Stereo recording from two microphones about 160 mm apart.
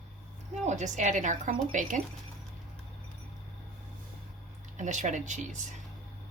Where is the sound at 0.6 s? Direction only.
45° right (ahead or behind).